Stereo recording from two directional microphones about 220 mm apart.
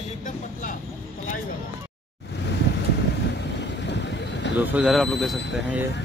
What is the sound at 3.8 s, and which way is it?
Boat, 50° left (ahead or behind).